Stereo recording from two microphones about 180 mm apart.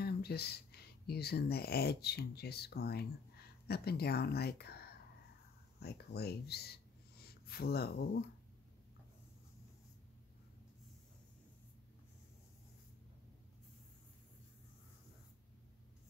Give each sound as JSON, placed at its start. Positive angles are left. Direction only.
{"t": 0.0, "sound": "speech", "side_deg": 60}